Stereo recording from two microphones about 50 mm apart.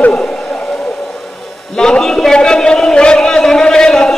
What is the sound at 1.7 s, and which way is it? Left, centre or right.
A man's voice, centre.